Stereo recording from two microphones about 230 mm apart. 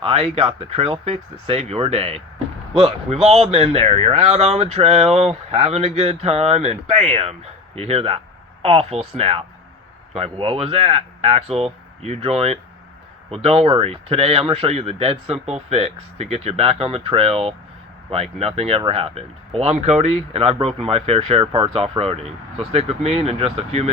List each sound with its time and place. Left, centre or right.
0.0 s speech: right